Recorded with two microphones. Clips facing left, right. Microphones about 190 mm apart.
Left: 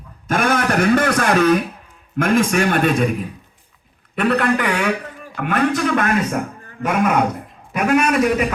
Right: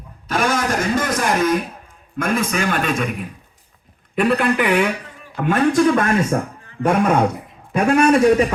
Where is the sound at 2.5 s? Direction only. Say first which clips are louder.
Left 4 dB; 50° left (ahead or behind).